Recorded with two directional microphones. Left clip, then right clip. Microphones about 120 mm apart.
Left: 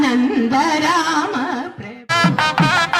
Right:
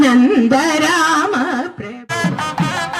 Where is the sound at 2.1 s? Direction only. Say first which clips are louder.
Left 4 dB; 10° left (ahead or behind).